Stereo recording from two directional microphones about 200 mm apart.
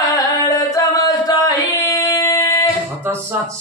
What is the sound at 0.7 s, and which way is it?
Singing, 20° left (ahead or behind).